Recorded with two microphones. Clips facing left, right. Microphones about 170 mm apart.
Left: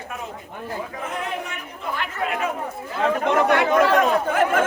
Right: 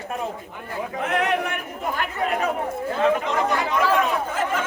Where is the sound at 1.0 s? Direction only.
70° right (ahead or behind).